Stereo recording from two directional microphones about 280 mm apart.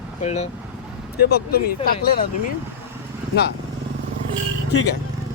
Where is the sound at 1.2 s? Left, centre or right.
Left.